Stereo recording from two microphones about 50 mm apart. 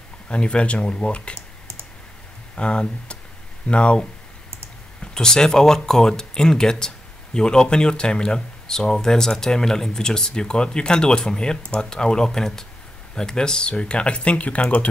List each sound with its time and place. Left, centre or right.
0.3 s speech: left
2.5 s speech: centre
5.0 s speech: centre